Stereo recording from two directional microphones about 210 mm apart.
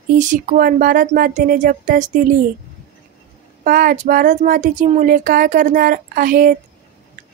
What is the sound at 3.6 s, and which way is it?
Speech, 45° right (ahead or behind).